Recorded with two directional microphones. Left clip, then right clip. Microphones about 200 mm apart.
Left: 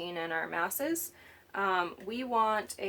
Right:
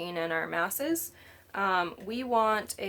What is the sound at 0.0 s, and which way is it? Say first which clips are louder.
Speech: right 3 dB; 30° right (ahead or behind).